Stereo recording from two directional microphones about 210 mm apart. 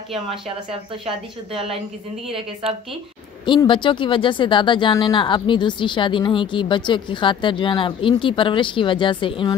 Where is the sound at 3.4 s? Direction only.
20° left (ahead or behind).